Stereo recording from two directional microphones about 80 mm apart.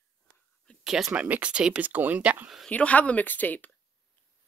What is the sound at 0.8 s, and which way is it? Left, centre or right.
Speech, centre.